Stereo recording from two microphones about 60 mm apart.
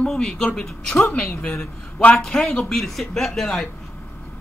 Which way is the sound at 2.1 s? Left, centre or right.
Centre.